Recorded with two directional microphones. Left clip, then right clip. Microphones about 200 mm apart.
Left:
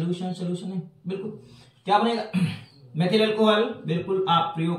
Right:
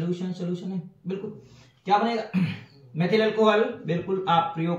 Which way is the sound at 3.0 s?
15° left (ahead or behind).